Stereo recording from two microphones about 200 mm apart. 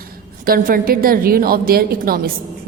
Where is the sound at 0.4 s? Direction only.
45° right (ahead or behind).